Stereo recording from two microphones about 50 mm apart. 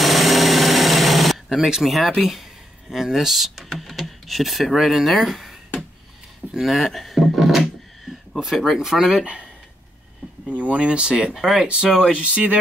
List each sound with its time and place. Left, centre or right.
0.0 s power tool: centre
1.7 s speech: centre
9.2 s speech: centre
10.8 s speech: centre
11.3 s speech: centre
11.6 s speech: centre